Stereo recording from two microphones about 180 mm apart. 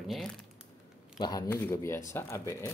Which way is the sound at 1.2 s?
25° left (ahead or behind).